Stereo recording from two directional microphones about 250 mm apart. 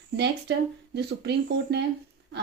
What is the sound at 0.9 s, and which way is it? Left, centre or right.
Speech, right.